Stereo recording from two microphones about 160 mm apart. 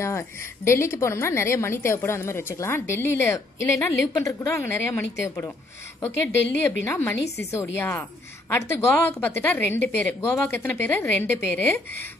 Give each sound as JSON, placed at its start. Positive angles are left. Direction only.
{"t": 0.7, "sound": "a woman's voice", "side_deg": 15}